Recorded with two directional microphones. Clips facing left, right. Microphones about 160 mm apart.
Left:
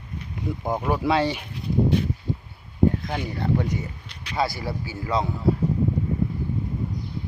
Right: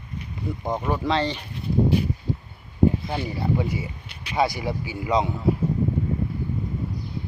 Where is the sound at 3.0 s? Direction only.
10° right (ahead or behind).